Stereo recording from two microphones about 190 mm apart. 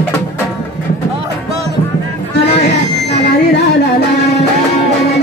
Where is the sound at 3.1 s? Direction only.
60° left (ahead or behind).